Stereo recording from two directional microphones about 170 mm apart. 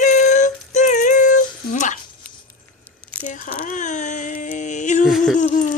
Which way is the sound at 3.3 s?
50° left (ahead or behind).